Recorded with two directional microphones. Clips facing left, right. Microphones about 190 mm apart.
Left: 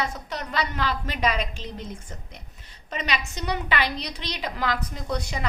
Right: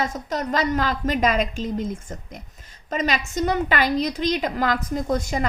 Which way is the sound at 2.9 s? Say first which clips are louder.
Right 6 dB; 45° right (ahead or behind).